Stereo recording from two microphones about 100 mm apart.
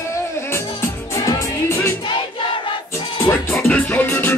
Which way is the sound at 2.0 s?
60° left (ahead or behind).